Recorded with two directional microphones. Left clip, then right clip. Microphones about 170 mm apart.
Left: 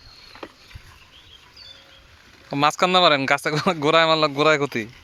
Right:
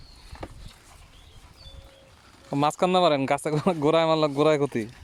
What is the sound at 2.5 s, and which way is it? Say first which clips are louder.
Speech: left 4 dB; 15° right (ahead or behind).